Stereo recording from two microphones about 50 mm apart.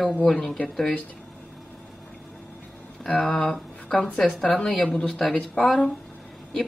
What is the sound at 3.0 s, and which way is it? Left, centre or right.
A woman's voice, centre.